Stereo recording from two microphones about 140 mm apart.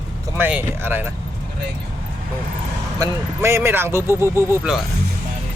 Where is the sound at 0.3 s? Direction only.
15° right (ahead or behind).